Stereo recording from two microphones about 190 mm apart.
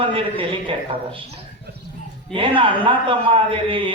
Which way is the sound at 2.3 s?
25° right (ahead or behind).